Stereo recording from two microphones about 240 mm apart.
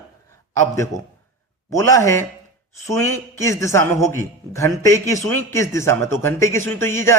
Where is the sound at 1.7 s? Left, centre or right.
Centre.